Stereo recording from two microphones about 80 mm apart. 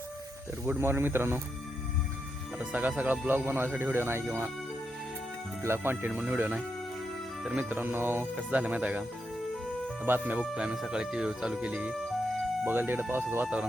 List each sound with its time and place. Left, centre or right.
0.6 s speech: right
2.6 s speech: centre; by 4.5 s right
5.6 s speech: right
6.1 s speech: centre
12.6 s speech: right